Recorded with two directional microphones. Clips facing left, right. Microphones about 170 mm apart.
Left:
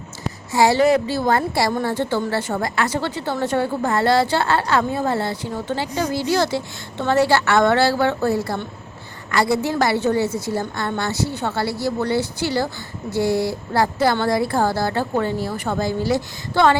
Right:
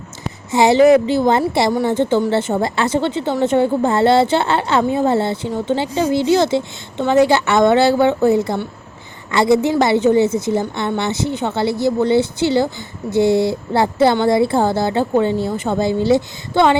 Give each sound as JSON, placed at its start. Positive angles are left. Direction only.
{"t": 0.5, "sound": "a woman's voice", "side_deg": -20}